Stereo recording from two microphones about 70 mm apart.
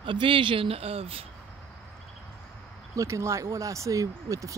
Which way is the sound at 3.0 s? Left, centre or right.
Right.